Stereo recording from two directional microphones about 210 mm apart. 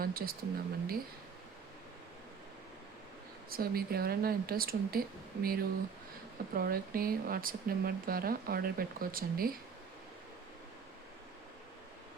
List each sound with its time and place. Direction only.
0.0 s speech: 45° right (ahead or behind)
3.5 s speech: 45° right (ahead or behind)